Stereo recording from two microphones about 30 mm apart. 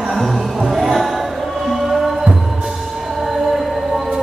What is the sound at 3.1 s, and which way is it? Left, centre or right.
Music, centre.